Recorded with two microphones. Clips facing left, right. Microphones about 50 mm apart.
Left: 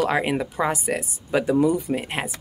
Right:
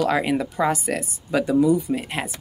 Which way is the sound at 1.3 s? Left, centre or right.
Left.